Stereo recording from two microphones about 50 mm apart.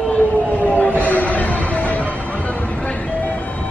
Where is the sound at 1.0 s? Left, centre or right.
Left.